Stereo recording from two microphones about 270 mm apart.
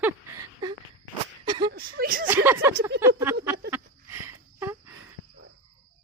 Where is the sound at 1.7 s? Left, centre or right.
Right.